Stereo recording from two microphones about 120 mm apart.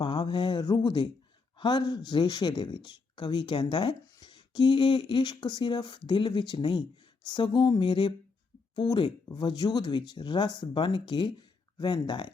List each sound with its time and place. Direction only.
0.0 s speech: 40° left (ahead or behind)